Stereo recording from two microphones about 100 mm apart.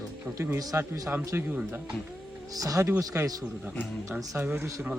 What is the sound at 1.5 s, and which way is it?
Speech, 15° right (ahead or behind).